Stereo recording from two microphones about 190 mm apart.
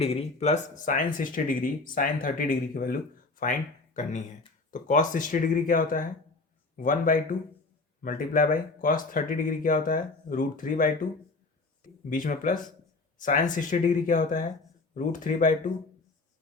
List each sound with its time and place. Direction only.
0.0 s speech: 30° left (ahead or behind)